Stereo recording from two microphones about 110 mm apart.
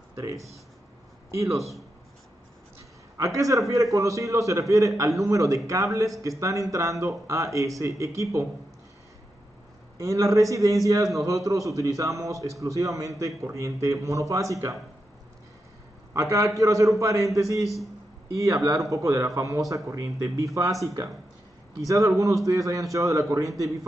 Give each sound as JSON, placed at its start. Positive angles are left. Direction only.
{"t": 0.1, "sound": "speech", "side_deg": -25}
{"t": 3.2, "sound": "a man's voice", "side_deg": -30}
{"t": 9.9, "sound": "a man's voice", "side_deg": -30}
{"t": 16.1, "sound": "a man's voice", "side_deg": -25}